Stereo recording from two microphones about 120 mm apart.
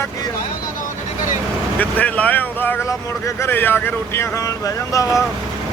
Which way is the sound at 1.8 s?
10° left (ahead or behind).